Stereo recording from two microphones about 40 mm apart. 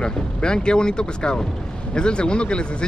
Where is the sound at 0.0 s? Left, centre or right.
Left.